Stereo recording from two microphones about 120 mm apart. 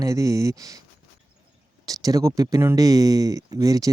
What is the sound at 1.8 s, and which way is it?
Speech, 30° right (ahead or behind).